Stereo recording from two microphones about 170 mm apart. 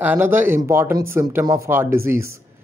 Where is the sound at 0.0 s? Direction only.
10° right (ahead or behind).